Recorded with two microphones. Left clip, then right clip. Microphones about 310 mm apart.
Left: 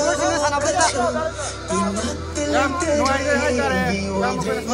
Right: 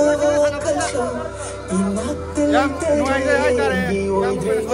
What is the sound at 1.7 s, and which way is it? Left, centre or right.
Music, centre.